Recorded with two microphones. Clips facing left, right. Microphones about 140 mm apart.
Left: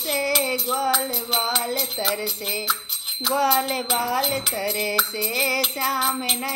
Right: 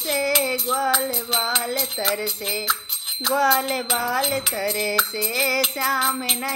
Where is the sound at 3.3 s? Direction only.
35° left (ahead or behind).